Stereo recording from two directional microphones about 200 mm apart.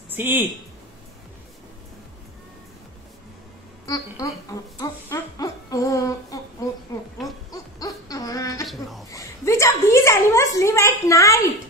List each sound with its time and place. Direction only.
0.1 s speech: 10° right (ahead or behind)
3.8 s a woman's voice: 15° left (ahead or behind)
7.8 s a sound: 15° left (ahead or behind)
9.1 s a woman's voice: 15° left (ahead or behind)